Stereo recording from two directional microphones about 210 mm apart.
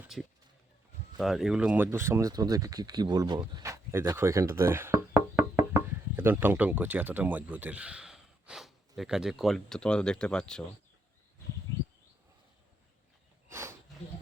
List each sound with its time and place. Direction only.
1.2 s speech: centre (ahead or behind)
5.4 s knock: 10° right (ahead or behind)
9.0 s speech: centre (ahead or behind)
13.5 s a sound: 10° right (ahead or behind)